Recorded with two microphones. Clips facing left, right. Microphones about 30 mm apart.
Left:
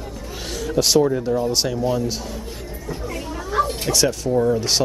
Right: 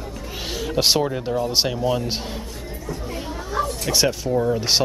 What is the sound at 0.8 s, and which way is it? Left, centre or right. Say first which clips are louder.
Speech: left 3 dB; right.